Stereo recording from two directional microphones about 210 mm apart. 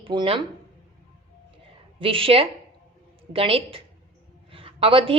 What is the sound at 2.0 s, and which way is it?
A woman's voice, 25° right (ahead or behind).